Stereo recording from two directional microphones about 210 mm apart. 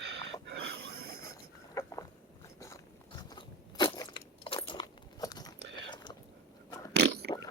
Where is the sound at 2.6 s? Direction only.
15° left (ahead or behind).